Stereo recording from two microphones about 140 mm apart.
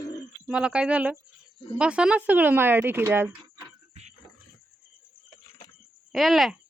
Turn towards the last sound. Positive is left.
turn(degrees=0)  # may be behind; listen again after turning